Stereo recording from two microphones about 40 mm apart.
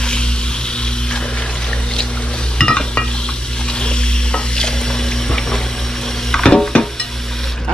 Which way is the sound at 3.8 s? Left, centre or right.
Left.